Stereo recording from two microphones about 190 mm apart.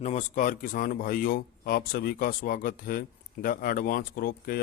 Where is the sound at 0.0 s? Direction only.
40° left (ahead or behind).